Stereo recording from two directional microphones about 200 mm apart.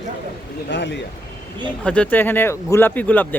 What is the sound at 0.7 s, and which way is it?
Speech, 60° left (ahead or behind).